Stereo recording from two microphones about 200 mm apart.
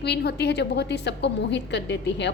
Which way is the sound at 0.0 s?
55° left (ahead or behind).